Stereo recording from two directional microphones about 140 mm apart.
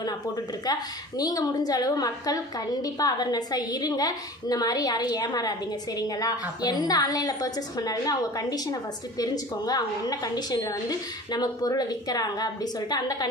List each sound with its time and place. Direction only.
0.7 s a woman's voice: 30° left (ahead or behind)